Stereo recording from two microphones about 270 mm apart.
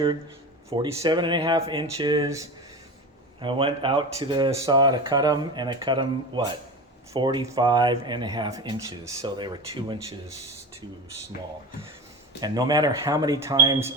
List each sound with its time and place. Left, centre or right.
0.7 s speech: centre
12.4 s speech: centre